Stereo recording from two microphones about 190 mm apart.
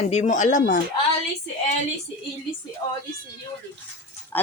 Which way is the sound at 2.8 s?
20° left (ahead or behind).